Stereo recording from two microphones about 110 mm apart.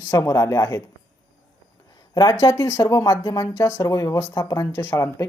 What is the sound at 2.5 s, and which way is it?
Speech, 25° left (ahead or behind).